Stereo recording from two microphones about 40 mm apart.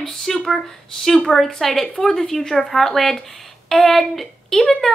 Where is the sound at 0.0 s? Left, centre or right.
Centre.